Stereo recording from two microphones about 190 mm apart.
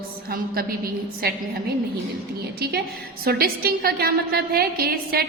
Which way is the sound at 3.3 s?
55° right (ahead or behind).